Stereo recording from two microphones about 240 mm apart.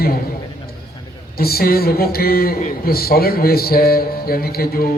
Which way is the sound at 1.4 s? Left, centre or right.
Left.